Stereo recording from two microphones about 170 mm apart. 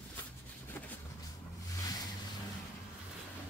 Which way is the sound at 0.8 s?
15° left (ahead or behind).